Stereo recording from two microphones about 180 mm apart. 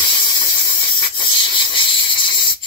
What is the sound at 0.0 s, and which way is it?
Steam, 25° left (ahead or behind).